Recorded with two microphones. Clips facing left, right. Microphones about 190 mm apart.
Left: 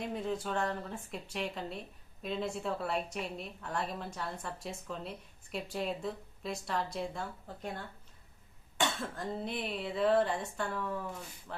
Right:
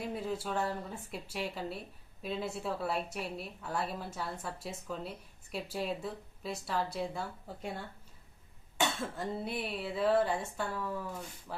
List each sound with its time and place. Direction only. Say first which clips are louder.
0.0 s a woman's voice: left 1 dB; 5° right (ahead or behind)
8.8 s a woman's voice: right 1 dB; 5° right (ahead or behind)